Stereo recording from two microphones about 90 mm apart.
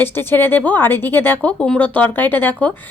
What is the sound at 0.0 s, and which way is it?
Speech, 25° left (ahead or behind).